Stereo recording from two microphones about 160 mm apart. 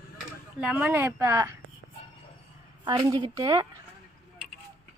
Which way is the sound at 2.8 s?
25° right (ahead or behind).